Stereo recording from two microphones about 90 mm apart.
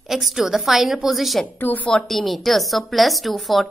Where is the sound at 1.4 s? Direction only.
20° left (ahead or behind).